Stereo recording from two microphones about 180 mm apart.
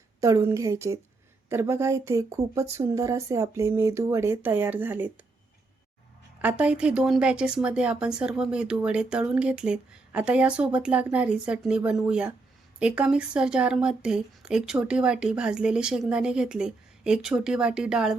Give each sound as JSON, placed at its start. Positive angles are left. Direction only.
{"t": 0.2, "sound": "speech", "side_deg": -15}
{"t": 6.4, "sound": "speech", "side_deg": -5}